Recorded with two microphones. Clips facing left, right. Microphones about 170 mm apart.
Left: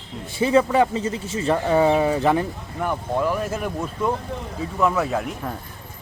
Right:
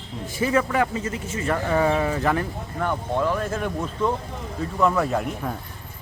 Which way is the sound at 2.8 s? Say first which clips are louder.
Left 1 dB; 10° left (ahead or behind).